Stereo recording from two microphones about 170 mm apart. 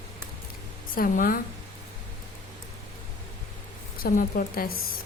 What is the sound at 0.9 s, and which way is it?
Speech, 55° left (ahead or behind).